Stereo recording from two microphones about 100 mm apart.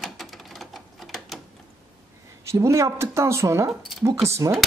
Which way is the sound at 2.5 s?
30° right (ahead or behind).